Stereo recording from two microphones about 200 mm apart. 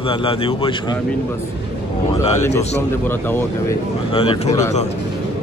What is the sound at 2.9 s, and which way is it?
Speech, 10° left (ahead or behind).